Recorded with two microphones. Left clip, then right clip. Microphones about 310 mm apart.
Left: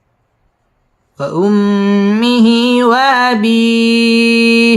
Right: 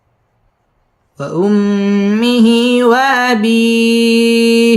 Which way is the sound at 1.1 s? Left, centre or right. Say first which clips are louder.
Left 1 dB; centre.